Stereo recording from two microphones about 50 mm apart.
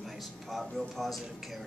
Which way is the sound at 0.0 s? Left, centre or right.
Centre.